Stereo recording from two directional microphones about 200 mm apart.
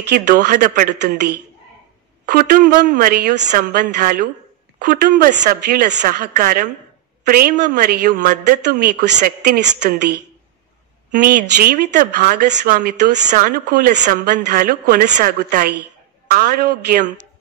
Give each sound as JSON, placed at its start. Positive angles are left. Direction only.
{"t": 0.1, "sound": "speech", "side_deg": -45}
{"t": 2.3, "sound": "speech", "side_deg": -45}